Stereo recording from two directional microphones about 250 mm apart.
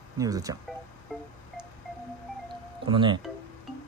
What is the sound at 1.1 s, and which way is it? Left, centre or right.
Wind chime, centre.